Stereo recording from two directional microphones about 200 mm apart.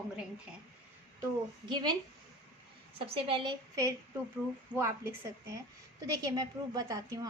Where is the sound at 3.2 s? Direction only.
25° right (ahead or behind).